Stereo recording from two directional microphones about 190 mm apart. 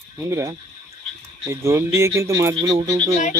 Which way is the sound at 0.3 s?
15° right (ahead or behind).